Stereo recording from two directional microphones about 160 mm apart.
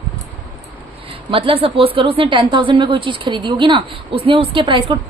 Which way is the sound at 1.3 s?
35° right (ahead or behind).